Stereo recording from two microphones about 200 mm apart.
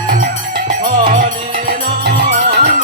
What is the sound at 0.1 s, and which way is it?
Music, 45° right (ahead or behind).